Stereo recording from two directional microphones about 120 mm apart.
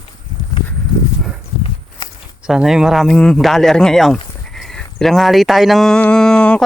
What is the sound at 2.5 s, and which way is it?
Speech, 5° right (ahead or behind).